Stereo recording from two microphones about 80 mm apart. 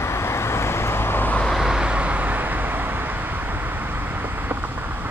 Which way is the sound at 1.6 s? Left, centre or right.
Centre.